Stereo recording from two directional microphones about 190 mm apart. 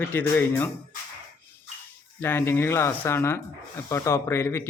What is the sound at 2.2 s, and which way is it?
Speech, 10° left (ahead or behind).